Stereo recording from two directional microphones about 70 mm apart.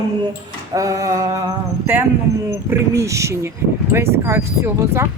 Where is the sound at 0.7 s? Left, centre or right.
Right.